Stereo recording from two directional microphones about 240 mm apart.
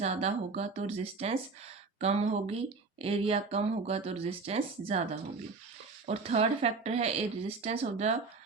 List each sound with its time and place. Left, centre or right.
0.0 s speech: right
6.1 s speech: right